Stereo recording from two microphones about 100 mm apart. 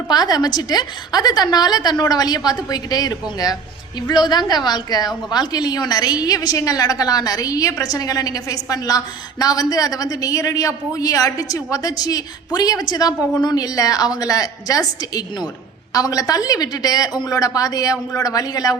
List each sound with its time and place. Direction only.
0.1 s a woman's voice: 40° left (ahead or behind)